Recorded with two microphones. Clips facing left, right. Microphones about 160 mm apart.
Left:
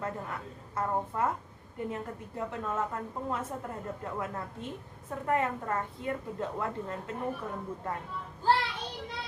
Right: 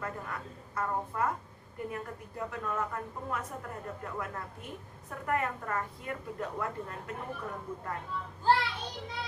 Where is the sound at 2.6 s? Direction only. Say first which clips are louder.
Left 1 dB; 25° left (ahead or behind).